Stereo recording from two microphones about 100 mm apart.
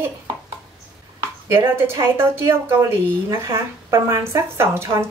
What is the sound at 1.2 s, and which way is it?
A woman's voice, 25° right (ahead or behind).